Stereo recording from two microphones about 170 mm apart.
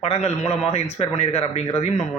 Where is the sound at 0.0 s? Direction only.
40° left (ahead or behind).